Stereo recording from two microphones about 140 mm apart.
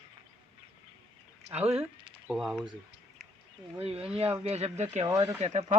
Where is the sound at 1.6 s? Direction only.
45° right (ahead or behind).